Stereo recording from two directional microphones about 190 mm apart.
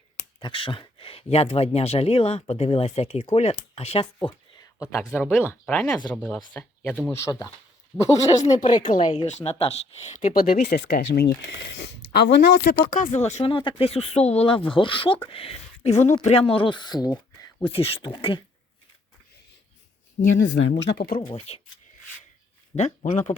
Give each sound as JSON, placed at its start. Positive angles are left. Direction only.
{"t": 0.3, "sound": "speech", "side_deg": 25}
{"t": 4.8, "sound": "speech", "side_deg": 15}
{"t": 9.0, "sound": "speech", "side_deg": 35}
{"t": 12.5, "sound": "speech", "side_deg": 30}
{"t": 12.9, "sound": "speech", "side_deg": 40}
{"t": 20.1, "sound": "speech", "side_deg": 70}
{"t": 21.2, "sound": "speech", "side_deg": 30}
{"t": 22.7, "sound": "speech", "side_deg": 40}